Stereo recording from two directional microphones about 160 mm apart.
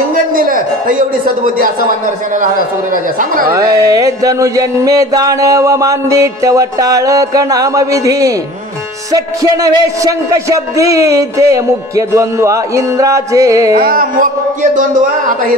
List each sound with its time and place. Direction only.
0.3 s a man's voice: 60° right (ahead or behind)
3.5 s music: 20° right (ahead or behind)
13.7 s a man's voice: 60° right (ahead or behind)